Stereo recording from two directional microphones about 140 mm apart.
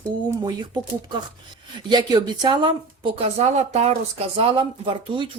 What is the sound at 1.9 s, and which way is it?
A woman's voice, 30° right (ahead or behind).